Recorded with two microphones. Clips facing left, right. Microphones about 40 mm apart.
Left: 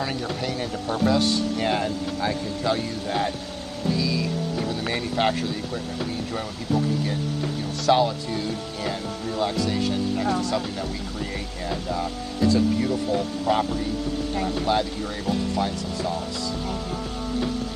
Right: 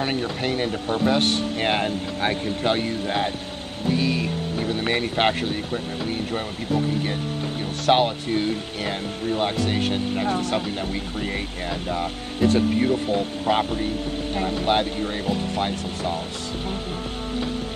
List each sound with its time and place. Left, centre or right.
0.0 s speech: right
3.9 s speech: right
7.8 s speech: right